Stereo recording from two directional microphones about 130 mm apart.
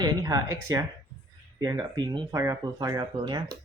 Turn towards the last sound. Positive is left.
turn(degrees=-35)  # may be behind; listen again after turning